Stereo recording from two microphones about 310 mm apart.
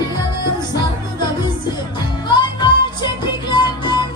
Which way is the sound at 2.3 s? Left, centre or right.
Centre.